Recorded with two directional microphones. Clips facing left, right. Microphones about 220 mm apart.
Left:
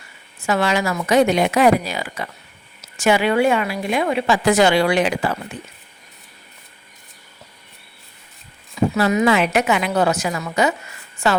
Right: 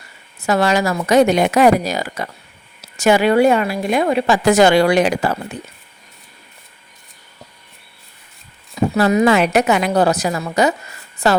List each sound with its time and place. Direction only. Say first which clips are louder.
0.4 s speech: right 3 dB; 40° right (ahead or behind)
9.0 s speech: right 4 dB; 40° right (ahead or behind)